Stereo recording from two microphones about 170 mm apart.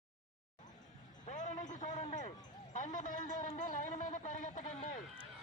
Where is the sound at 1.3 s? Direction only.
45° left (ahead or behind).